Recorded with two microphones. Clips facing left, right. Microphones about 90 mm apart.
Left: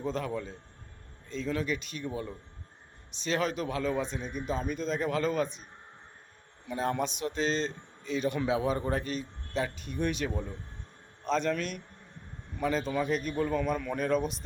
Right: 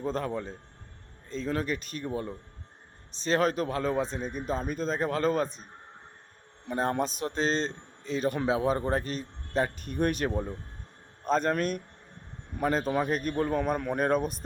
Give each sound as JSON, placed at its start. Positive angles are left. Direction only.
{"t": 1.3, "sound": "a man's voice", "side_deg": -40}
{"t": 6.7, "sound": "a man's voice", "side_deg": -40}
{"t": 10.3, "sound": "a man's voice", "side_deg": -30}
{"t": 11.3, "sound": "a man's voice", "side_deg": -45}